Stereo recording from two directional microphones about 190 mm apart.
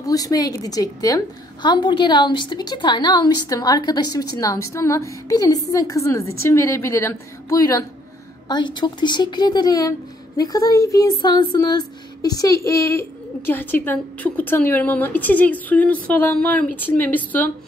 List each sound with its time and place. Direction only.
0.0 s a woman's voice: 20° left (ahead or behind)